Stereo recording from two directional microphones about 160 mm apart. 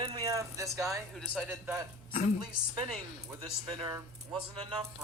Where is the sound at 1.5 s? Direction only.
10° right (ahead or behind).